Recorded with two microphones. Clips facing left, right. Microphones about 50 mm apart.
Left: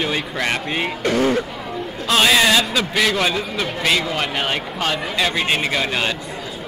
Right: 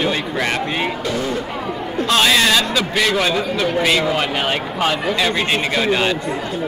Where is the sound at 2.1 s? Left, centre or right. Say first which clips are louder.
Even; centre.